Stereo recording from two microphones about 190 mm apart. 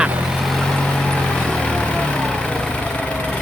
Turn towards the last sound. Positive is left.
turn(degrees=5)  # may be behind; listen again after turning